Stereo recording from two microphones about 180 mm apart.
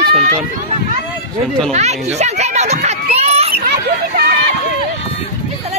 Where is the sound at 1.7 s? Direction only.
35° right (ahead or behind).